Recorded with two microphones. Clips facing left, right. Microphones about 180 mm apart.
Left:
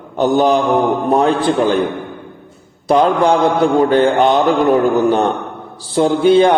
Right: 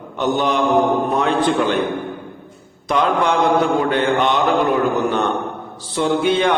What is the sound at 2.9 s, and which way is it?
A man's voice, 35° left (ahead or behind).